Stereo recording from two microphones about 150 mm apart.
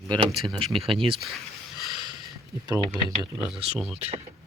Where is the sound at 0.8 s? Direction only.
40° right (ahead or behind).